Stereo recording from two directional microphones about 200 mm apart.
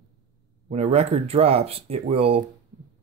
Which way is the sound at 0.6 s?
30° right (ahead or behind).